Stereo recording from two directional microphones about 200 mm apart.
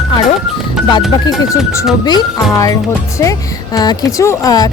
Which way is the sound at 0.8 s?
Centre (ahead or behind).